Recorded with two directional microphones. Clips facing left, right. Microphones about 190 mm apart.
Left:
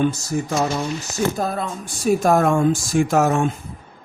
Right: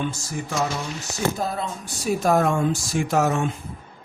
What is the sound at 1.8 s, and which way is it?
A man's voice, 50° left (ahead or behind).